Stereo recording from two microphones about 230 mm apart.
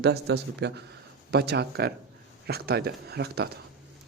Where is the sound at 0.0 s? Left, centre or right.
Right.